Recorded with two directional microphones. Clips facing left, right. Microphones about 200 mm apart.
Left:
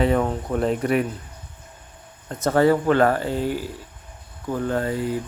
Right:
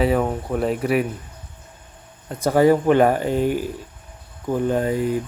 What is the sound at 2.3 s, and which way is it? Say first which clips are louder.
Speech: right 2 dB; 10° right (ahead or behind).